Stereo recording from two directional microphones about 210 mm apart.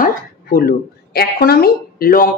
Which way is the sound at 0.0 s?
45° left (ahead or behind).